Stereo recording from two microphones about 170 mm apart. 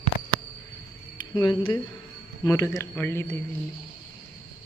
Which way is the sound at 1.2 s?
25° left (ahead or behind).